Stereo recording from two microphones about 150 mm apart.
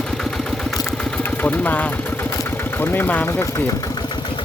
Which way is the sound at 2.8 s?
15° left (ahead or behind).